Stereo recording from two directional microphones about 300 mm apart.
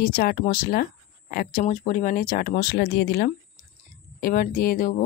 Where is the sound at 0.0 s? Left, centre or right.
Left.